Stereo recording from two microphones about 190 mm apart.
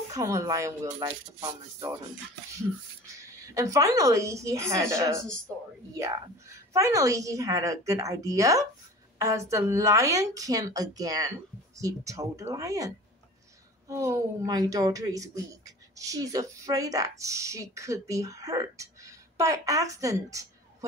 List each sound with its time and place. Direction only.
0.1 s speech: 15° right (ahead or behind)
3.3 s speech: 15° right (ahead or behind)
6.7 s speech: 15° right (ahead or behind)